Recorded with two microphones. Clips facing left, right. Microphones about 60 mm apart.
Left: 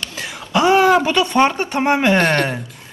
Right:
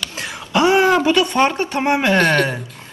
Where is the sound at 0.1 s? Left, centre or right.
Right.